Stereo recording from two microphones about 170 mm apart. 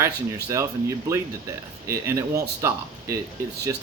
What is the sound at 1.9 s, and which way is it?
Speech, 15° right (ahead or behind).